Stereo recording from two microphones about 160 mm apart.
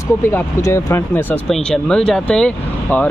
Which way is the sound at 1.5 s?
5° left (ahead or behind).